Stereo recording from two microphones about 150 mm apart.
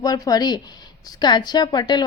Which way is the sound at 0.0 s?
25° left (ahead or behind).